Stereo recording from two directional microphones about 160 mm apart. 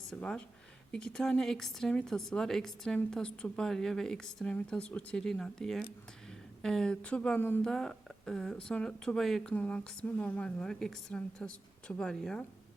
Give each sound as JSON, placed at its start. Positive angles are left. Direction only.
{"t": 0.1, "sound": "speech", "side_deg": 5}